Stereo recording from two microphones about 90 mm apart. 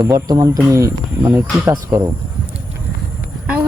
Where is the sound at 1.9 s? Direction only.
20° right (ahead or behind).